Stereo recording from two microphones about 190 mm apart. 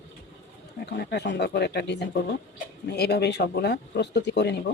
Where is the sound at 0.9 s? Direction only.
60° left (ahead or behind).